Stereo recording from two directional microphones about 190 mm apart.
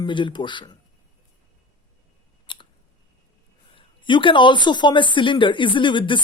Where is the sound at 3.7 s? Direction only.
25° left (ahead or behind).